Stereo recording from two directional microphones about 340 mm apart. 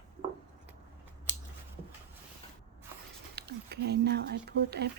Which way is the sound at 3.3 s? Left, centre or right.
Right.